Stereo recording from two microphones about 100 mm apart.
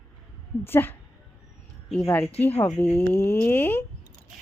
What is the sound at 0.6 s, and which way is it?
Speech, 20° left (ahead or behind).